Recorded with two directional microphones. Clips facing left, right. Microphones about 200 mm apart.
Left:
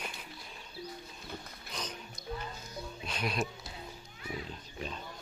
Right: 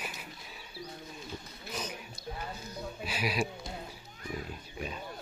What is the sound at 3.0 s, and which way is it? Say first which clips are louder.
Music: right 2 dB; 5° right (ahead or behind).